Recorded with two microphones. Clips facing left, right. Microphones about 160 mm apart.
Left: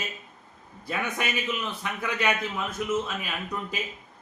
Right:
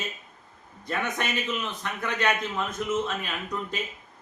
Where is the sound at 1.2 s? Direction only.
5° left (ahead or behind).